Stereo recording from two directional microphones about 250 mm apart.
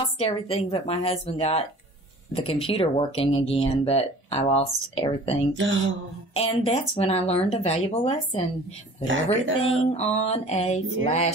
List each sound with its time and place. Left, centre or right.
0.2 s speech: left
5.5 s speech: right
6.3 s speech: left
9.0 s speech: right
9.6 s speech: left